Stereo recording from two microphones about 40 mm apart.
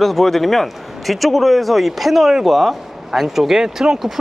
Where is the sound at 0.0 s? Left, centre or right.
Centre.